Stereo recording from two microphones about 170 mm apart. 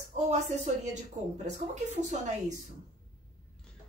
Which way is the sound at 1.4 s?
45° right (ahead or behind).